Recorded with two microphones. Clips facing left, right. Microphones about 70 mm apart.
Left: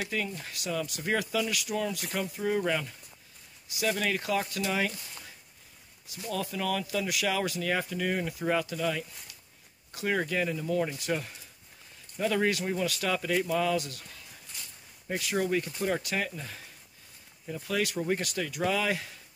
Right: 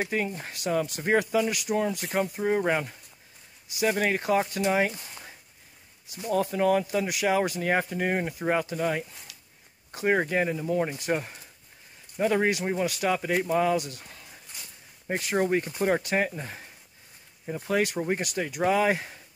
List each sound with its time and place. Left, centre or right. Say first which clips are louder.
0.0 s speech: right 5 dB; right
15.0 s speech: right 4 dB; right